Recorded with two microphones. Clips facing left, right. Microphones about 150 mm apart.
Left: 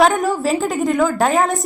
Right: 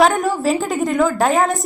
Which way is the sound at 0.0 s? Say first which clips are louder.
Even; centre (ahead or behind).